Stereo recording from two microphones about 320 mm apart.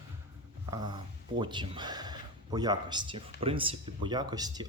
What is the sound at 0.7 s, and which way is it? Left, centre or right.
Speech, centre.